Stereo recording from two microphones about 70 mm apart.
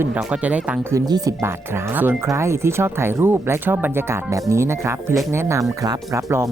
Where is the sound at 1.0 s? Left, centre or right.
Right.